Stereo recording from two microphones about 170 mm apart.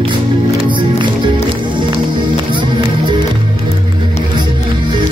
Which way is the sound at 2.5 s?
30° right (ahead or behind).